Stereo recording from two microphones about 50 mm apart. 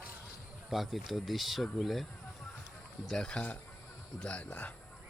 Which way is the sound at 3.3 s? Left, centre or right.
Left.